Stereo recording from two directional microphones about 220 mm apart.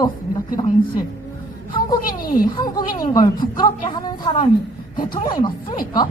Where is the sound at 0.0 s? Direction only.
20° left (ahead or behind).